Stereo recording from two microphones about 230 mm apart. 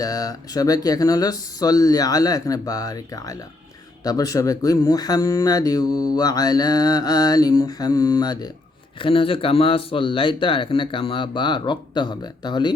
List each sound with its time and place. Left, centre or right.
0.0 s speech: centre